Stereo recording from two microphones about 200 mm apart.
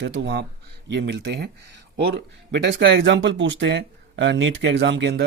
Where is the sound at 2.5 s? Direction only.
60° right (ahead or behind).